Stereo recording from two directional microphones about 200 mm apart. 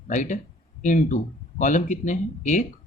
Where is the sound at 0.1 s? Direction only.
40° left (ahead or behind).